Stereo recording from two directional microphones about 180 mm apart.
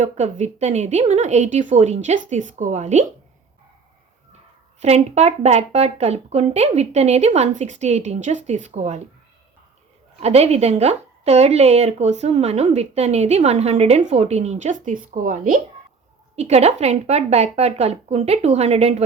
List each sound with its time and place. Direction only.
0.0 s speech: 40° right (ahead or behind)
4.8 s speech: 40° right (ahead or behind)
10.2 s speech: 35° right (ahead or behind)
16.3 s speech: 35° right (ahead or behind)